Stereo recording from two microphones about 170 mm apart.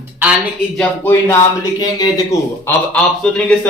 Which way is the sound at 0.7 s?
10° left (ahead or behind).